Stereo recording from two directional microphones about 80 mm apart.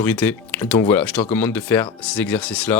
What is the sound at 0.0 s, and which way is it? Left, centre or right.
Speech, centre.